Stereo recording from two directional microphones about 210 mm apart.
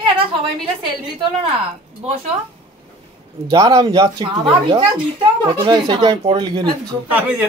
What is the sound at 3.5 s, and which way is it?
Speech, 20° right (ahead or behind).